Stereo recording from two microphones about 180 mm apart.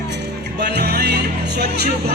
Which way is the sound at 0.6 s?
65° right (ahead or behind).